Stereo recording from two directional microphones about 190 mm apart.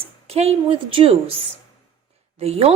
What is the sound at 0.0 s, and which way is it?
A woman's voice, 30° right (ahead or behind).